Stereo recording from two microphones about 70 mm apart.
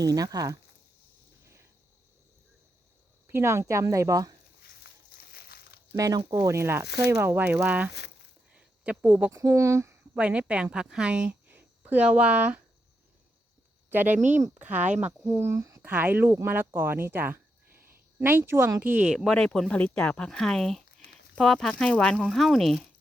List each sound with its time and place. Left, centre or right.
0.0 s speech: right
3.2 s speech: right
6.0 s speech: right
6.5 s speech: right; by 7.9 s centre
8.5 s a sound: centre
9.3 s speech: right
10.0 s speech: centre
11.4 s a sound: right
13.9 s speech: right
15.3 s speech: right
15.8 s speech: right
18.8 s speech: centre
19.1 s speech: centre